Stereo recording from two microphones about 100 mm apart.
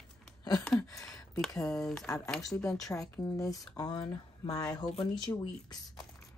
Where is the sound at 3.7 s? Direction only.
45° left (ahead or behind).